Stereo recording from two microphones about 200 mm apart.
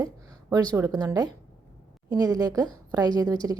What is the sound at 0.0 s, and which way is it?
A woman's voice, 20° right (ahead or behind).